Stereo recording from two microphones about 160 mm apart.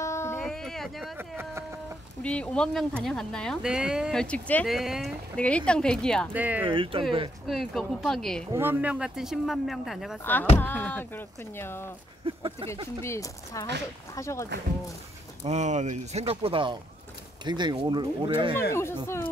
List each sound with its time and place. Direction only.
0.0 s a sound: 15° left (ahead or behind)
0.5 s a sound: centre (ahead or behind)
1.1 s a sound: 15° right (ahead or behind)
2.2 s speech: 5° left (ahead or behind)
6.3 s speech: 10° right (ahead or behind)
6.7 s speech: 30° right (ahead or behind)
7.4 s speech: centre (ahead or behind)
8.5 s speech: 10° right (ahead or behind)
10.6 s speech: 10° left (ahead or behind)
12.3 s speech: 35° right (ahead or behind)
13.0 s speech: 20° left (ahead or behind)
15.4 s speech: 45° right (ahead or behind); by 18.5 s 30° right (ahead or behind)
18.7 s speech: 15° left (ahead or behind)